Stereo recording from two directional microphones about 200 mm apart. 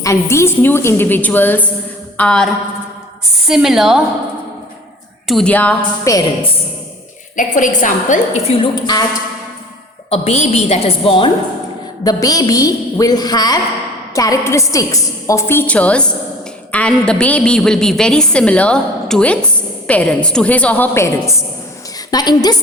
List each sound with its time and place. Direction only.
0.0 s a woman's voice: 15° left (ahead or behind); by 4.0 s centre (ahead or behind)
5.3 s a woman's voice: 5° left (ahead or behind)
7.3 s a woman's voice: 40° left (ahead or behind)
8.6 s a woman's voice: 20° left (ahead or behind)
10.1 s a woman's voice: 35° left (ahead or behind)